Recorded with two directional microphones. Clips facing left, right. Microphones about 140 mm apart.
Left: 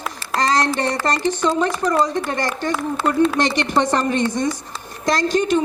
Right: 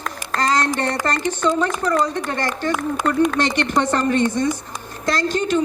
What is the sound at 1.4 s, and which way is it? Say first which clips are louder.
Speech: even; 15° left (ahead or behind).